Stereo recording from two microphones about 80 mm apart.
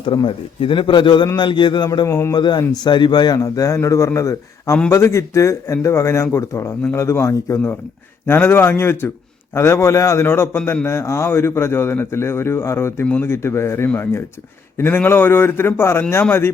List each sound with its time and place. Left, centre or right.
0.0 s a man's voice: left
1.4 s a man's voice: left
2.0 s a man's voice: left
2.3 s a man's voice: left